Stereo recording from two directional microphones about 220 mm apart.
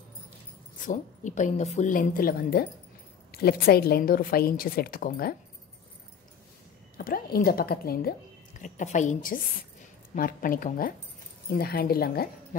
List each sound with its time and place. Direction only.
0.7 s a woman's voice: 35° left (ahead or behind)
7.0 s a woman's voice: 40° left (ahead or behind)